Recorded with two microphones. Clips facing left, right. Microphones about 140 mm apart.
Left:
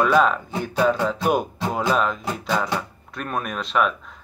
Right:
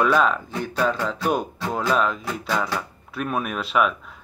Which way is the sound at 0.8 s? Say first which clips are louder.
Left 4 dB; 10° left (ahead or behind).